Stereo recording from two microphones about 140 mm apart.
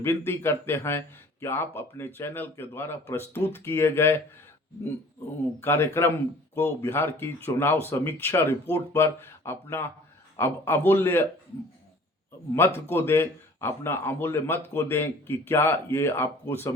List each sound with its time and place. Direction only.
0.0 s a man's voice: 15° left (ahead or behind)
5.5 s a man's voice: 15° left (ahead or behind)
12.5 s a man's voice: 15° left (ahead or behind)